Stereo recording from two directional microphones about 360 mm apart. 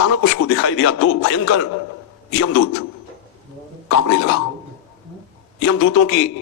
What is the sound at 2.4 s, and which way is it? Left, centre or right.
Speech, left.